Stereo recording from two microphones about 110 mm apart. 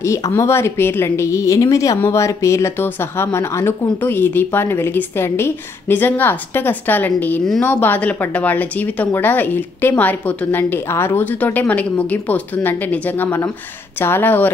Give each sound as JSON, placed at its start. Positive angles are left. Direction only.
{"t": 0.0, "sound": "a woman's voice", "side_deg": 25}